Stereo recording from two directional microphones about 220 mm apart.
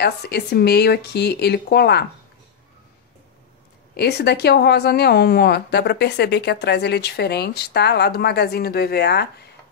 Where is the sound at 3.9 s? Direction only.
50° left (ahead or behind).